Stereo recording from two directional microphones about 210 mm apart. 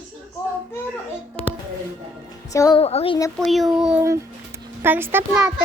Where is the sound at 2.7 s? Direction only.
30° left (ahead or behind).